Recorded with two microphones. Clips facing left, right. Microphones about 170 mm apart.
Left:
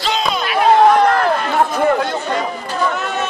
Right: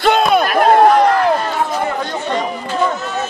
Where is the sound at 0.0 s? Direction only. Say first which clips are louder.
Right 7 dB; 55° right (ahead or behind).